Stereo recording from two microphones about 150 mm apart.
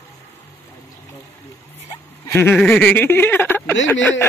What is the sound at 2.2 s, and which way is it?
Speech, 15° left (ahead or behind).